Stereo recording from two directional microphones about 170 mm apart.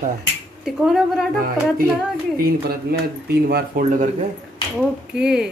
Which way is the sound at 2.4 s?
65° right (ahead or behind).